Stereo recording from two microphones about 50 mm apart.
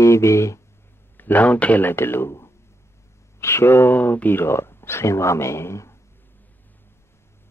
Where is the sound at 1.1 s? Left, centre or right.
Left.